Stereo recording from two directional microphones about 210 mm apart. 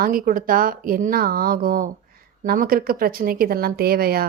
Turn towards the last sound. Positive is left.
turn(degrees=-45)  # may be behind; listen again after turning